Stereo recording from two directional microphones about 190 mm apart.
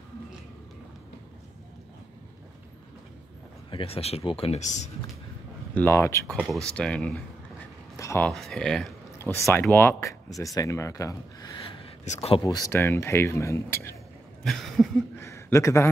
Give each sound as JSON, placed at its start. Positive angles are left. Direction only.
{"t": 3.7, "sound": "speech", "side_deg": 30}
{"t": 5.8, "sound": "speech", "side_deg": 15}
{"t": 6.3, "sound": "speech", "side_deg": 0}
{"t": 8.0, "sound": "sheep", "side_deg": 15}
{"t": 8.3, "sound": "speech", "side_deg": 0}
{"t": 12.0, "sound": "speech", "side_deg": 35}
{"t": 12.4, "sound": "speech", "side_deg": 20}
{"t": 14.4, "sound": "a sound", "side_deg": 0}
{"t": 15.1, "sound": "a sound", "side_deg": 15}